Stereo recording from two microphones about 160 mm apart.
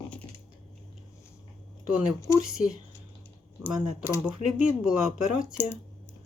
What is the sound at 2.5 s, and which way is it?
Speech, 5° right (ahead or behind).